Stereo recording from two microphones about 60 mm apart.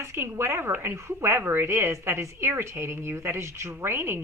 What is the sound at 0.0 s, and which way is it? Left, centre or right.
A woman's voice, right.